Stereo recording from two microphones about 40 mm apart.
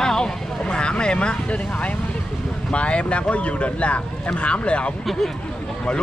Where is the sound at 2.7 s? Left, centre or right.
Left.